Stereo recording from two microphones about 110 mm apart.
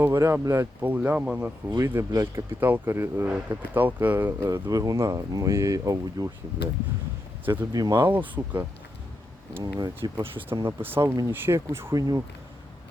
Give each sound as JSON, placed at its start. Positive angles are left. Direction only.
{"t": 0.0, "sound": "speech", "side_deg": -25}
{"t": 0.8, "sound": "speech", "side_deg": -15}
{"t": 1.7, "sound": "speech", "side_deg": -25}
{"t": 7.4, "sound": "speech", "side_deg": -20}
{"t": 7.7, "sound": "speech", "side_deg": -35}
{"t": 8.0, "sound": "speech", "side_deg": -20}
{"t": 10.8, "sound": "speech", "side_deg": -20}